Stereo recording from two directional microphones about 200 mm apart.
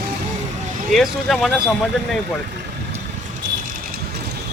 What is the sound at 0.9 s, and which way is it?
Speech, centre (ahead or behind).